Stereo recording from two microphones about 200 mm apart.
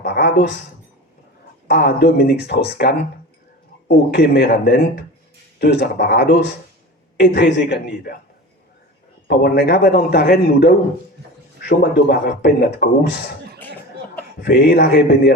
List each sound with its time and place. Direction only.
0.0 s a sound: 55° left (ahead or behind)
1.6 s a man's voice: 55° left (ahead or behind)
9.2 s speech: 50° left (ahead or behind)
14.4 s speech: 55° left (ahead or behind)